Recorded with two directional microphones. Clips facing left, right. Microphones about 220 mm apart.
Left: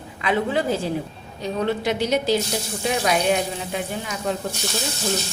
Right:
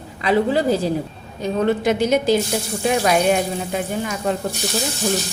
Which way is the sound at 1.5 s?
50° right (ahead or behind).